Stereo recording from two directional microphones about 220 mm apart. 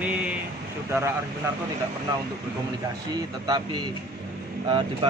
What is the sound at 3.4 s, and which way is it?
Speech, 20° right (ahead or behind).